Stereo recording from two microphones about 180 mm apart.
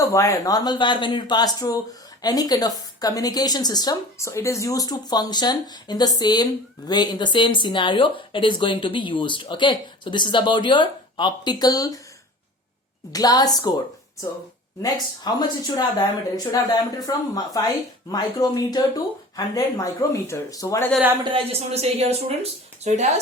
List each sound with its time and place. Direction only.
0.0 s a woman's voice: 20° left (ahead or behind)
13.1 s a woman's voice: 20° left (ahead or behind)
14.8 s a woman's voice: 20° left (ahead or behind)
21.2 s speech: 35° right (ahead or behind)